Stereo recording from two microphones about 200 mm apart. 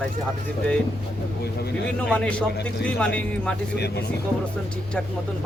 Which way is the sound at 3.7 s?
55° left (ahead or behind).